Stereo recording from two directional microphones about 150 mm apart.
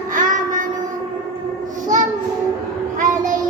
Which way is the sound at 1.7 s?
60° right (ahead or behind).